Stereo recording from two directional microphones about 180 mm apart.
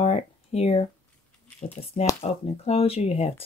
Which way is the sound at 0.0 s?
35° left (ahead or behind).